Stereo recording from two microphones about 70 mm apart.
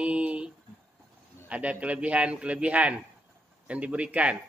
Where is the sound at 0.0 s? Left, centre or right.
Centre.